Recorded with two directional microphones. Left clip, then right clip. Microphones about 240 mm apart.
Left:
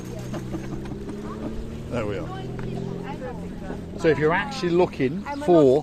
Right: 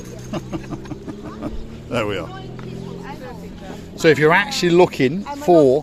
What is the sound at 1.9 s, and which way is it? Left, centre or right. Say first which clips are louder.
Speech: right 6 dB; right.